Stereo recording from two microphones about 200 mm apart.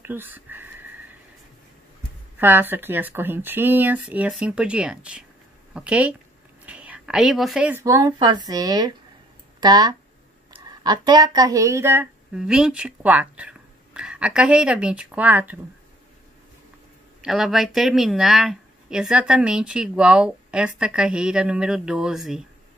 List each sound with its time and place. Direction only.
0.0 s speech: 10° right (ahead or behind)
2.3 s speech: 10° right (ahead or behind)
17.2 s speech: centre (ahead or behind)